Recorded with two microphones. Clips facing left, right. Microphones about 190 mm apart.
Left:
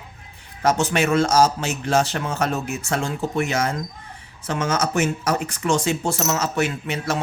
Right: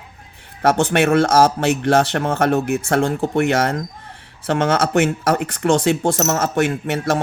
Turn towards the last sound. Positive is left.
turn(degrees=-50)  # may be behind; listen again after turning